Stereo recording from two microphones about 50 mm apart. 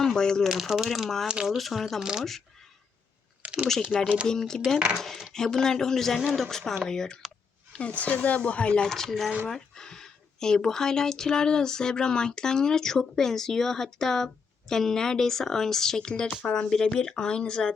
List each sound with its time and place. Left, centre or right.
0.0 s speech: centre
0.4 s speech: centre
3.4 s typing: right
3.9 s speech: left
4.3 s speech: centre
7.7 s a woman's voice: left
8.8 s speech: centre